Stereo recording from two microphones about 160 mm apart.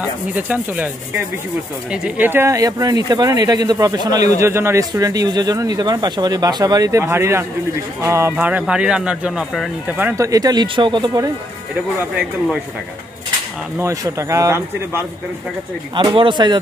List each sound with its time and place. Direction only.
0.0 s speech: 10° right (ahead or behind)
1.9 s speech: 10° right (ahead or behind)
9.9 s speech: 15° right (ahead or behind)
12.0 s speech: 5° right (ahead or behind)
13.7 s speech: 20° right (ahead or behind)
15.9 s speech: 30° right (ahead or behind)